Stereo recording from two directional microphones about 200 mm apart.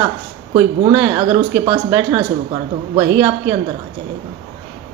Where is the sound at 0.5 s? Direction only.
15° right (ahead or behind).